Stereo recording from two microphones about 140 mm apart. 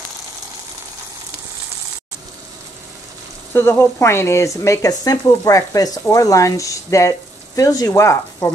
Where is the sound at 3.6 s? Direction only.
15° left (ahead or behind).